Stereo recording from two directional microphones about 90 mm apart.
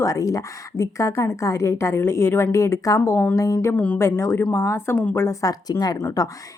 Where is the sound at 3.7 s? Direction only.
15° left (ahead or behind).